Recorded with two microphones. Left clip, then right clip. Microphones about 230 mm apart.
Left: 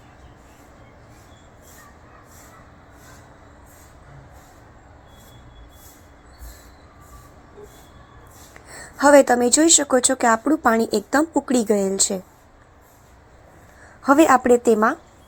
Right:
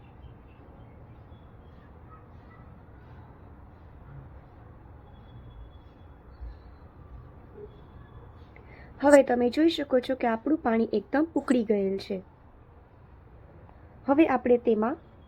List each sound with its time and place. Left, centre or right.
9.0 s a woman's voice: centre
14.0 s a woman's voice: centre